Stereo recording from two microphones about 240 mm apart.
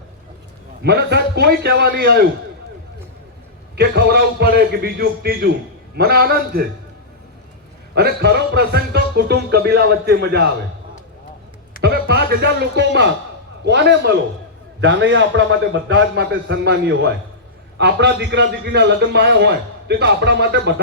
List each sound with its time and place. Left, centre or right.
0.8 s music: right
3.8 s music: right
7.9 s music: right
11.8 s a man's voice: right